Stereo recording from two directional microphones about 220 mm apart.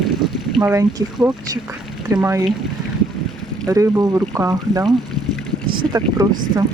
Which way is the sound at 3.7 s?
15° right (ahead or behind).